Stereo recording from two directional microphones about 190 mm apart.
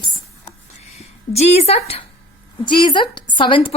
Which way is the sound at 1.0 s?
35° left (ahead or behind).